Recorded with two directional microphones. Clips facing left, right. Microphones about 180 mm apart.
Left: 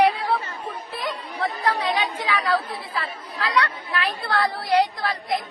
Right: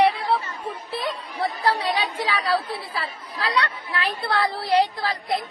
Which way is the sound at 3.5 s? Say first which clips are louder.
Left 2 dB; 25° right (ahead or behind).